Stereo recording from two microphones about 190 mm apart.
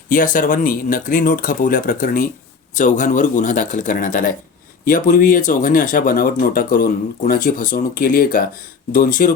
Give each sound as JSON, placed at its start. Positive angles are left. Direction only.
{"t": 0.1, "sound": "speech", "side_deg": 45}